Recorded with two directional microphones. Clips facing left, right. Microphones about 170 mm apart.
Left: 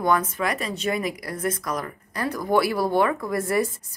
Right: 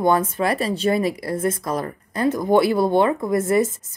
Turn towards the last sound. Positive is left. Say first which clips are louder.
# right 5 dB
turn(degrees=-20)  # may be behind; listen again after turning